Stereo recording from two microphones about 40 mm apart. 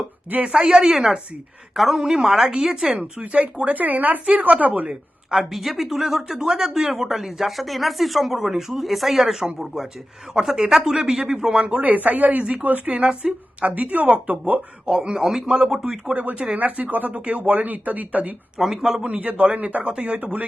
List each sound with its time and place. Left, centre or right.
0.4 s a man's voice: centre
1.7 s a woman's voice: centre
3.0 s speech: right
3.8 s speech: right
4.9 s speech: centre
5.5 s a man's voice: centre
11.6 s speech: right
12.9 s speech: right
13.6 s speech: right
14.8 s a man's voice: centre
16.6 s speech: right
18.6 s a man's voice: centre
19.2 s speech: right